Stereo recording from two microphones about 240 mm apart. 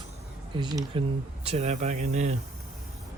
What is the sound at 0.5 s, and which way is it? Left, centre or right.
Speech, centre.